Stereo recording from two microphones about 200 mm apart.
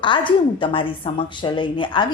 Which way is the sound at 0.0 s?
25° left (ahead or behind).